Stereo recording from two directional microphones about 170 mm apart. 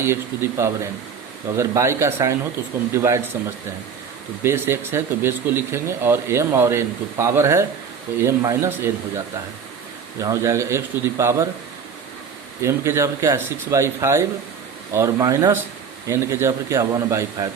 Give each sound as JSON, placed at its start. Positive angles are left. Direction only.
{"t": 0.0, "sound": "speech", "side_deg": -15}
{"t": 4.4, "sound": "speech", "side_deg": -15}
{"t": 12.6, "sound": "speech", "side_deg": -15}